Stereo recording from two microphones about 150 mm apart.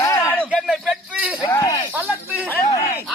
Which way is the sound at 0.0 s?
20° left (ahead or behind).